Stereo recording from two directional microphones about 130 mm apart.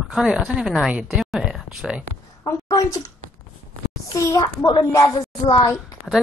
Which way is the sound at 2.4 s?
25° left (ahead or behind).